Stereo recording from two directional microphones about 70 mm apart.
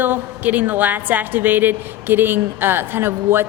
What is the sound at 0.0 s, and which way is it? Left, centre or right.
A woman's voice, right.